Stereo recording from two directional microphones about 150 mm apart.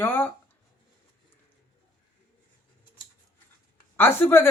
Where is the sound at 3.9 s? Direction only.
15° left (ahead or behind).